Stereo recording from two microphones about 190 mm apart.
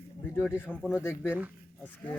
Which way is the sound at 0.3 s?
10° left (ahead or behind).